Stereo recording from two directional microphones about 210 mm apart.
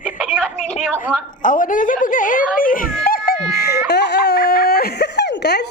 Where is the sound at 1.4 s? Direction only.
40° left (ahead or behind).